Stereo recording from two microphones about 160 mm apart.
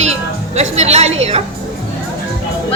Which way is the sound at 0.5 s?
45° right (ahead or behind).